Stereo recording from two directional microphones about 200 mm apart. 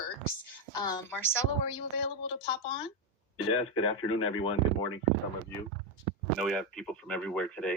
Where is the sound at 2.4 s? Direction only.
30° left (ahead or behind).